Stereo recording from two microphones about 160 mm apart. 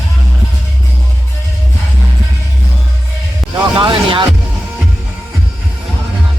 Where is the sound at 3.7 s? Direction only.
35° right (ahead or behind).